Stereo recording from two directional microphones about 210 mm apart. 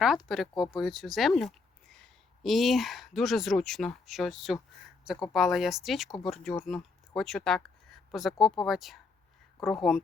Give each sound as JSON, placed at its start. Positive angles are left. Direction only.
{"t": 0.0, "sound": "speech", "side_deg": 0}